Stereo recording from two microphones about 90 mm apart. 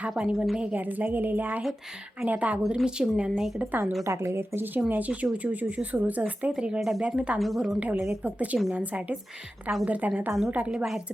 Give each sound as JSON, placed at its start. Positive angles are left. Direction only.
{"t": 0.1, "sound": "speech", "side_deg": -5}
{"t": 3.6, "sound": "a woman's voice", "side_deg": -20}
{"t": 4.0, "sound": "a woman's voice", "side_deg": -30}
{"t": 7.3, "sound": "a woman's voice", "side_deg": 0}
{"t": 7.8, "sound": "speech", "side_deg": -15}